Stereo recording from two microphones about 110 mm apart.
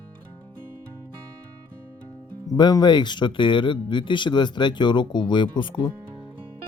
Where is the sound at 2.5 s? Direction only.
35° left (ahead or behind).